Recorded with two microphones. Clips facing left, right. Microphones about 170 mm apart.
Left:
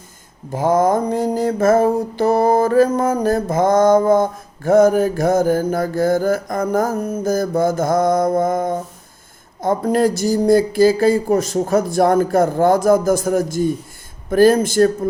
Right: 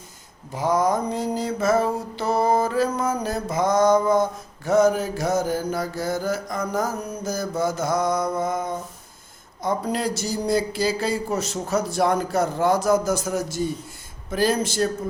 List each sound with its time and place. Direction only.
0.5 s mantra: 50° left (ahead or behind)